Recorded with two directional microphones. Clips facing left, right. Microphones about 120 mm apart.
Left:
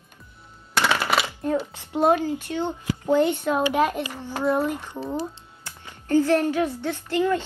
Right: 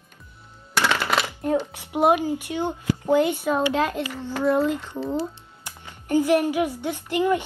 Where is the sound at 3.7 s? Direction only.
15° left (ahead or behind).